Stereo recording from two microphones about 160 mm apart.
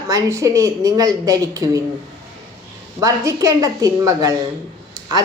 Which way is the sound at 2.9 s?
20° right (ahead or behind).